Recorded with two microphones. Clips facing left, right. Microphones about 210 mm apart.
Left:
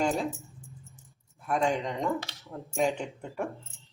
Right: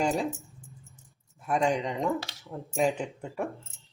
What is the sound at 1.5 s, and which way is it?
Speech, centre (ahead or behind).